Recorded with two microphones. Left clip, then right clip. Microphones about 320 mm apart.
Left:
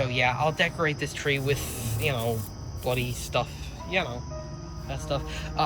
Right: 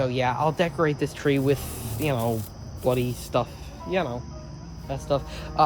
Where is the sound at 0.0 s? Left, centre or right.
Centre.